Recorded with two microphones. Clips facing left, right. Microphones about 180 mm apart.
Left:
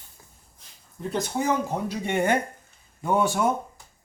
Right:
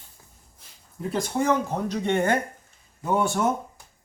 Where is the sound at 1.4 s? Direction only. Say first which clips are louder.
Right 1 dB; 10° left (ahead or behind).